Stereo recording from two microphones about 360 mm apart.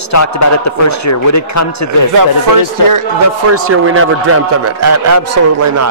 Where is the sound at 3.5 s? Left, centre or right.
Right.